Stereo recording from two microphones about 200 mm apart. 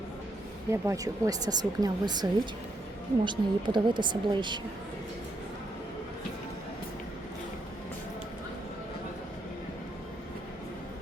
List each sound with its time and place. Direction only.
0.7 s a woman's voice: 15° right (ahead or behind)